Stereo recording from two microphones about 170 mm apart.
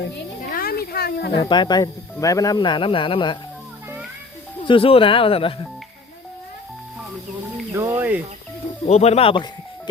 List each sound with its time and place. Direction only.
0.0 s a sound: 60° left (ahead or behind)
1.4 s speech: 25° left (ahead or behind)
4.6 s speech: 30° left (ahead or behind)
7.7 s speech: 15° right (ahead or behind)
8.9 s speech: 40° left (ahead or behind)